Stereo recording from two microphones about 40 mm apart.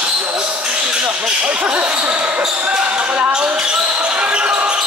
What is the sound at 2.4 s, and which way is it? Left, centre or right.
Basketball bounce, right.